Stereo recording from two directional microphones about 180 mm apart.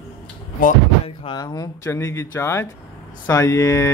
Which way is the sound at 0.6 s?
50° left (ahead or behind).